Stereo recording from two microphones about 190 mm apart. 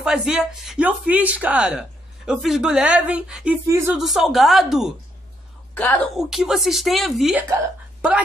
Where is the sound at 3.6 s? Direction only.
15° right (ahead or behind).